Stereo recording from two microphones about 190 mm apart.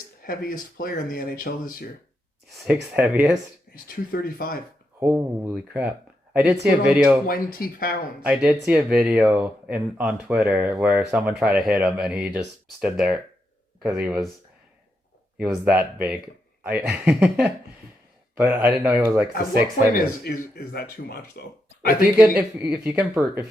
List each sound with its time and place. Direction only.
0.2 s speech: 50° left (ahead or behind)
2.9 s speech: 10° right (ahead or behind)
3.8 s speech: 50° left (ahead or behind)
4.9 s speech: 10° right (ahead or behind)
7.3 s speech: 50° left (ahead or behind)
8.2 s speech: 5° right (ahead or behind)
15.4 s speech: 5° right (ahead or behind)
19.9 s speech: 45° left (ahead or behind)
22.2 s speech: 5° right (ahead or behind)